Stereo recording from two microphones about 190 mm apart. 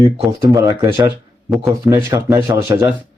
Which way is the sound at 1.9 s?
15° right (ahead or behind).